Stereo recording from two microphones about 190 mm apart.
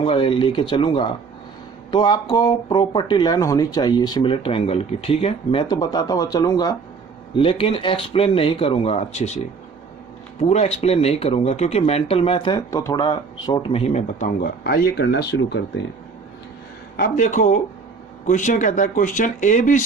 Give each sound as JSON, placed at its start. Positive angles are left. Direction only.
{"t": 0.0, "sound": "speech", "side_deg": 30}
{"t": 10.4, "sound": "speech", "side_deg": 35}
{"t": 17.0, "sound": "speech", "side_deg": 45}